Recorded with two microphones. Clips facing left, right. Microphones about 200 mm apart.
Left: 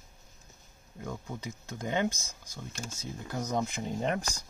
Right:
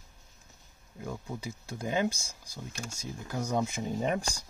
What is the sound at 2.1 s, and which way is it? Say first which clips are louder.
Speech: right 1 dB; 30° right (ahead or behind).